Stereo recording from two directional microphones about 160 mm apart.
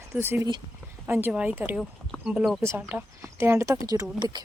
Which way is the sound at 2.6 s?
15° right (ahead or behind).